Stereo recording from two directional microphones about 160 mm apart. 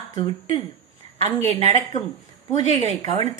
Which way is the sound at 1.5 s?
40° right (ahead or behind).